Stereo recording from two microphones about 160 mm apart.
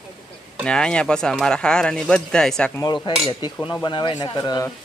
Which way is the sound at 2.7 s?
20° left (ahead or behind).